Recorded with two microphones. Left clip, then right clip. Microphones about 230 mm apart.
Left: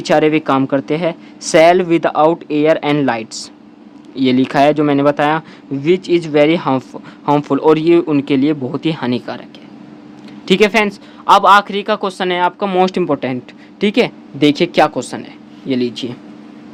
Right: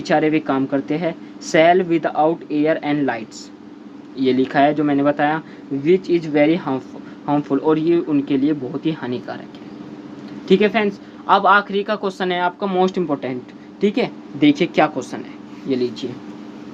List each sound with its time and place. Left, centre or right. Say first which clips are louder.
0.0 s a man's voice: left 5 dB; left
10.4 s a man's voice: left 4 dB; left